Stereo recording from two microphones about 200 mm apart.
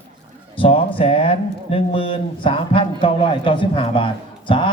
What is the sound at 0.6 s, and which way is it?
Speech, 25° left (ahead or behind).